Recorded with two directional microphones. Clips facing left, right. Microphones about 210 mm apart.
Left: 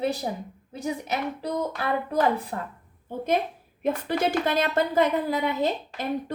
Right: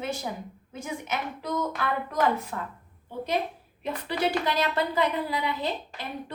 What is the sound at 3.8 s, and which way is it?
A woman's voice, 50° left (ahead or behind).